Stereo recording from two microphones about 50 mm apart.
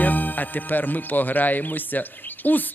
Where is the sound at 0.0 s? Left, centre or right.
Left.